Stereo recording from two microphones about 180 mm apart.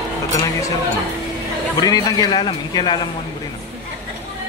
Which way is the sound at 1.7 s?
20° left (ahead or behind).